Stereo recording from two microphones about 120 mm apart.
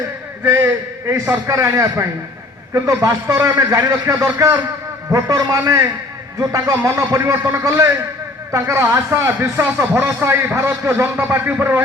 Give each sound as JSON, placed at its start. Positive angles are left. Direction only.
{"t": 0.4, "sound": "speech", "side_deg": -20}